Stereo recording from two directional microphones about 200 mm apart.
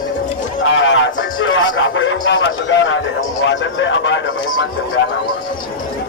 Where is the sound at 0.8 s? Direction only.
70° left (ahead or behind).